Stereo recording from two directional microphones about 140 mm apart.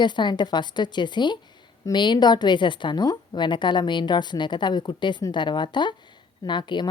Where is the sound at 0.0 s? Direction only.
30° left (ahead or behind).